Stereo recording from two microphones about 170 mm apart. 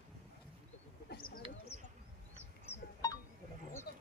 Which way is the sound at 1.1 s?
60° left (ahead or behind).